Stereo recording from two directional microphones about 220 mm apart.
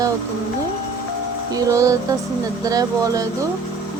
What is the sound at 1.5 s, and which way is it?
Speech, 15° right (ahead or behind).